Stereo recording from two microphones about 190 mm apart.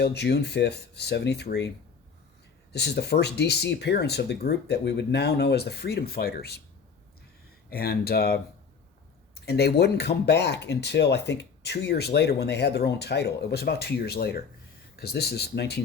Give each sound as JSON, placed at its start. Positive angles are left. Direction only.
{"t": 0.0, "sound": "speech", "side_deg": 60}
{"t": 2.7, "sound": "speech", "side_deg": 60}
{"t": 7.7, "sound": "speech", "side_deg": 55}